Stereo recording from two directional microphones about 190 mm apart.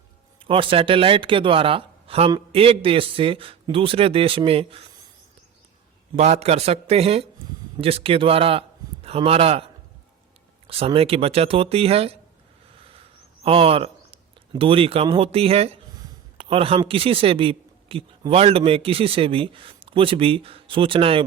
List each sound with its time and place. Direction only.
0.3 s speech: 30° right (ahead or behind)
6.1 s speech: 35° right (ahead or behind)
10.7 s speech: 30° right (ahead or behind)
13.4 s a man's voice: 30° right (ahead or behind)